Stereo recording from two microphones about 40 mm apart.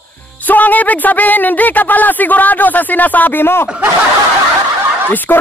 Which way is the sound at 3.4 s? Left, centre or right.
Left.